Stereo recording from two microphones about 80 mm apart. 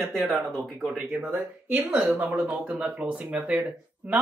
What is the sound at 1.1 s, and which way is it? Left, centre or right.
Speech, right.